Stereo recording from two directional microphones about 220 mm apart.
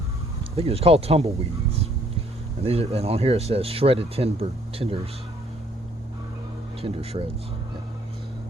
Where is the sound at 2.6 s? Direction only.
25° right (ahead or behind).